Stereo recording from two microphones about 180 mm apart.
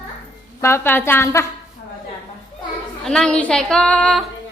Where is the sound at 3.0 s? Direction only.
5° left (ahead or behind).